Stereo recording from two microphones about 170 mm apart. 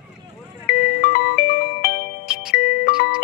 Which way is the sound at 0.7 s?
60° left (ahead or behind).